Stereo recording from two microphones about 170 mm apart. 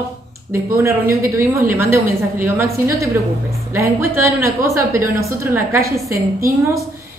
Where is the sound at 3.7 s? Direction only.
15° right (ahead or behind).